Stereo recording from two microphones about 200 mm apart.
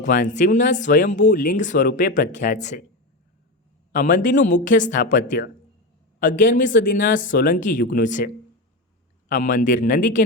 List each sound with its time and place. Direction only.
0.0 s speech: 40° left (ahead or behind)
3.9 s a man's voice: 40° left (ahead or behind)
9.3 s speech: 40° left (ahead or behind)